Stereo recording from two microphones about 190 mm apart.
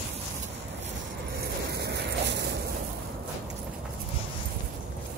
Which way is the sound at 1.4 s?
60° right (ahead or behind).